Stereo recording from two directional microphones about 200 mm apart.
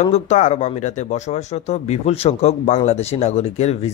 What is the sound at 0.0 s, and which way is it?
Speech, 35° left (ahead or behind).